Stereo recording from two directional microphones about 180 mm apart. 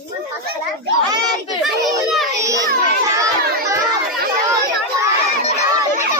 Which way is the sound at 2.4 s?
20° right (ahead or behind).